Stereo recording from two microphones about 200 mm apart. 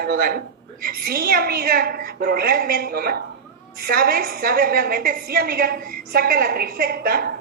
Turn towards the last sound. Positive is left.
turn(degrees=-50)  # may be behind; listen again after turning